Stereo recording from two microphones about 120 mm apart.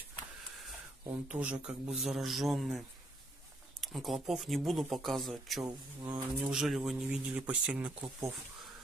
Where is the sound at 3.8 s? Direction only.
Centre (ahead or behind).